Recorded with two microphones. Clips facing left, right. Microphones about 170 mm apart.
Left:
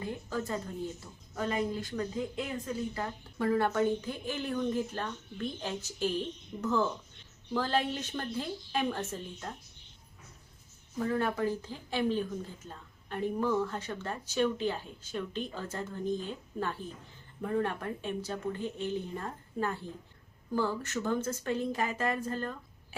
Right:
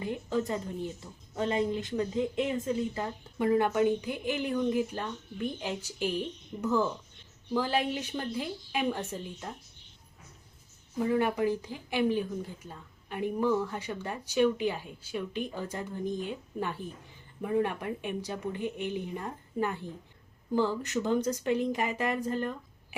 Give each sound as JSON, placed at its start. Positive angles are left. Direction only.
{"t": 0.0, "sound": "a woman's voice", "side_deg": -20}
{"t": 10.9, "sound": "a woman's voice", "side_deg": -15}